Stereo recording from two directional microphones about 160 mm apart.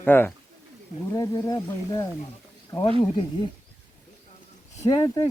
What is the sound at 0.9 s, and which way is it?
Speech, 25° left (ahead or behind).